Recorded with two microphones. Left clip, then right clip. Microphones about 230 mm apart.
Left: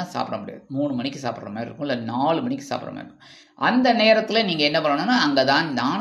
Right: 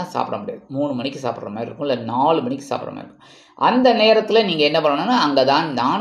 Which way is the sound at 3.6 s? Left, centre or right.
Left.